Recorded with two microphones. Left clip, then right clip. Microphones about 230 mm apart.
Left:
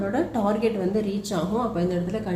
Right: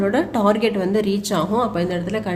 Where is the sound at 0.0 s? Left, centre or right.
Right.